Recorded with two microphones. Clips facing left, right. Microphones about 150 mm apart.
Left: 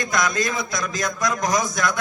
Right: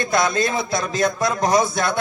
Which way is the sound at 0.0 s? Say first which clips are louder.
Right 3 dB; 30° right (ahead or behind).